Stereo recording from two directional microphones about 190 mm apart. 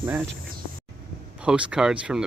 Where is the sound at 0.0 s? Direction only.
10° right (ahead or behind).